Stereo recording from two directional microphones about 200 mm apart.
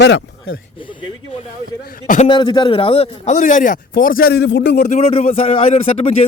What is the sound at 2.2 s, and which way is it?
A man's voice, 20° left (ahead or behind).